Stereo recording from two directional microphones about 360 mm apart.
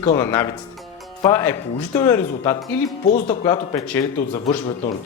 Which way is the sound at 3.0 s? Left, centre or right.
Left.